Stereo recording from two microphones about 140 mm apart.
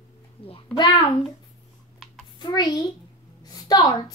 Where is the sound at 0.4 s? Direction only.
40° left (ahead or behind).